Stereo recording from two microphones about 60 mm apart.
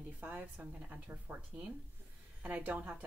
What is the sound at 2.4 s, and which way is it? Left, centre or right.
Speech, right.